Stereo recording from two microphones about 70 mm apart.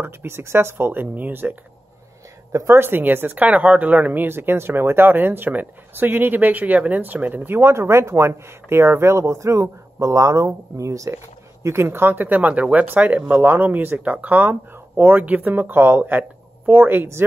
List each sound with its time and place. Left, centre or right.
0.0 s speech: right
2.5 s speech: right
11.6 s speech: right